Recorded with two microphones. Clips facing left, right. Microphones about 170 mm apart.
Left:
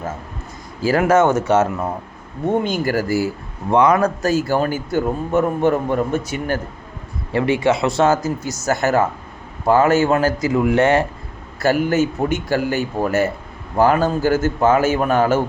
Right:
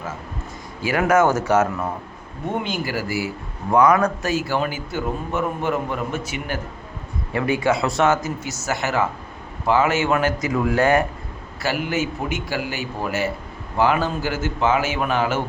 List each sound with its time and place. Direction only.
0.8 s speech: 35° left (ahead or behind)
2.6 s a man's voice: 45° left (ahead or behind)
3.7 s a man's voice: 25° left (ahead or behind); by 6.6 s 45° left (ahead or behind)
7.3 s speech: 25° left (ahead or behind)
8.6 s a man's voice: 45° left (ahead or behind); by 11.0 s 25° left (ahead or behind)
11.6 s a man's voice: 45° left (ahead or behind)